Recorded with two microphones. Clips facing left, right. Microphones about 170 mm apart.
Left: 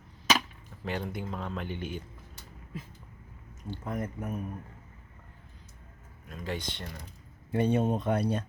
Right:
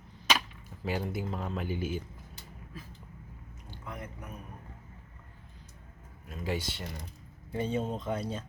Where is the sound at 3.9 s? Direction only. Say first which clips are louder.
Left 8 dB; 45° left (ahead or behind).